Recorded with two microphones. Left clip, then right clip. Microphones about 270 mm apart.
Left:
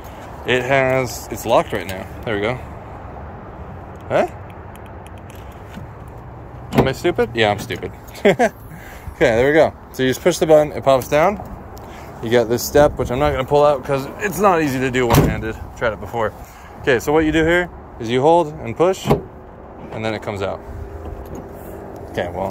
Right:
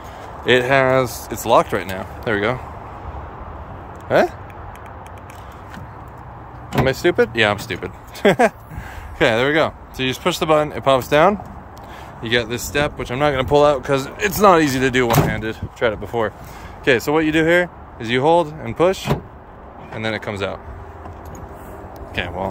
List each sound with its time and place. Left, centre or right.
0.5 s speech: right
1.3 s speech: centre
6.7 s speech: centre
12.2 s speech: centre
15.8 s speech: right
17.9 s speech: centre